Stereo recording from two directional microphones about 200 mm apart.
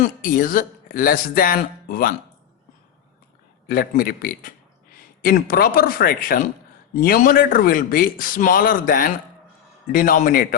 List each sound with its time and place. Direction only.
0.0 s speech: 45° left (ahead or behind)
3.7 s speech: 45° left (ahead or behind)